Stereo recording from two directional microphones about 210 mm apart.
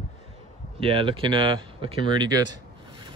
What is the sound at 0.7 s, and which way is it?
Speech, 25° right (ahead or behind).